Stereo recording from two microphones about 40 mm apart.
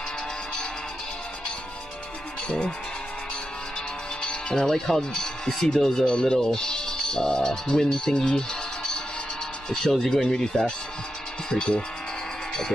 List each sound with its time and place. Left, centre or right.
2.4 s speech: left
4.2 s music: left
4.6 s speech: centre